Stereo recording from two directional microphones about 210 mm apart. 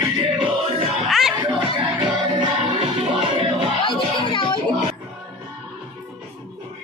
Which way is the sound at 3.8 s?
25° left (ahead or behind).